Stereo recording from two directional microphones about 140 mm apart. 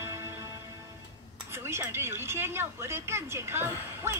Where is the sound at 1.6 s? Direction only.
15° right (ahead or behind).